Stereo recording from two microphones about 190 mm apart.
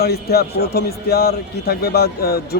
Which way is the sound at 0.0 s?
55° left (ahead or behind).